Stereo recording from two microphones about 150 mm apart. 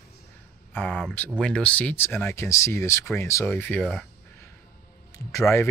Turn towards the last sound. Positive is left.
turn(degrees=20)  # may be behind; listen again after turning